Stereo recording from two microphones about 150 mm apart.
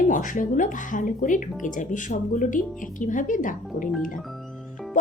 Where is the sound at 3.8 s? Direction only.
Centre (ahead or behind).